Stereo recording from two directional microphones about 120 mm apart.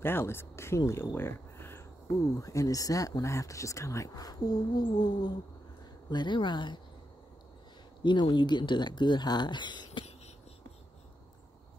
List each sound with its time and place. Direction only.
0.0 s speech: 20° left (ahead or behind); by 6.8 s 40° left (ahead or behind)
8.0 s speech: 40° left (ahead or behind)